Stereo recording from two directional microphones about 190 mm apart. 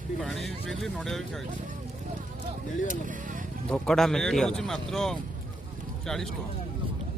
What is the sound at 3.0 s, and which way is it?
Vehicle, 45° right (ahead or behind).